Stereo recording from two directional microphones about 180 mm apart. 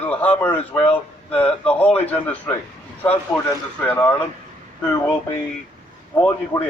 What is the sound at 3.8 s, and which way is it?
Speech, 10° left (ahead or behind).